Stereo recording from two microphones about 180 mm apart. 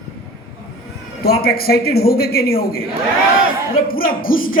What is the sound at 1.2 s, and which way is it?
A man's voice, 60° left (ahead or behind).